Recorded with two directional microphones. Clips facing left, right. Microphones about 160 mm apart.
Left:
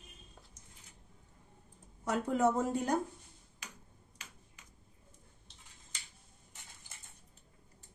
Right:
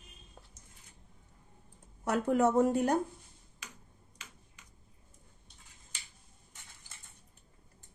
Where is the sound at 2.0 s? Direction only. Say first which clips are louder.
Right 3 dB; 65° right (ahead or behind).